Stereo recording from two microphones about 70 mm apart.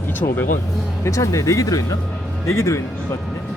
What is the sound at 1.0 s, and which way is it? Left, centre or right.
Speech, left.